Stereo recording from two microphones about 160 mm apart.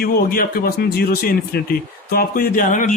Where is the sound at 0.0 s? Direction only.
65° left (ahead or behind).